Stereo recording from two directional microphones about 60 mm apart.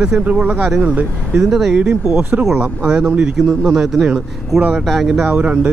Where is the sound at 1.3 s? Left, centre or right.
Centre.